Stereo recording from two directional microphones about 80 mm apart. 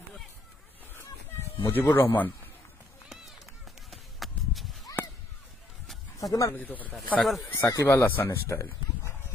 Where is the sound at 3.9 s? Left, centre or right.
Centre.